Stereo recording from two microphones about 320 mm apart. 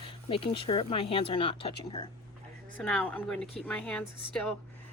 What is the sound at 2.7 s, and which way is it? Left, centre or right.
Speech, centre.